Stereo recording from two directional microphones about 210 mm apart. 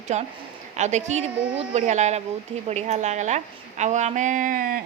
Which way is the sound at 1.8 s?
35° right (ahead or behind).